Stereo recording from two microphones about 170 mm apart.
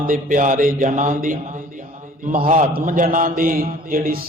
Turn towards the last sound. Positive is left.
turn(degrees=-55)  # may be behind; listen again after turning